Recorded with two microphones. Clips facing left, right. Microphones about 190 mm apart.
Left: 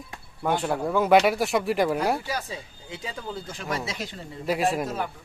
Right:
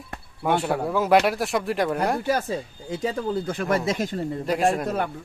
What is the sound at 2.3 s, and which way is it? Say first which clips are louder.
Speech: right 8 dB; 50° right (ahead or behind).